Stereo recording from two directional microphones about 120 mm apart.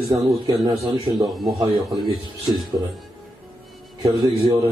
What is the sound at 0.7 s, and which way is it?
Speech, 35° right (ahead or behind).